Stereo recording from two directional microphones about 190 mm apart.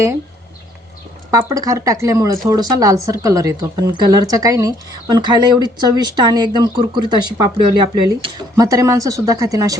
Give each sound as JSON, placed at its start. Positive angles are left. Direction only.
{"t": 1.3, "sound": "speech", "side_deg": -20}